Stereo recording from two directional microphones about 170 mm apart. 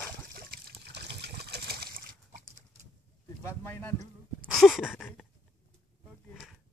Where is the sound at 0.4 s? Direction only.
65° right (ahead or behind).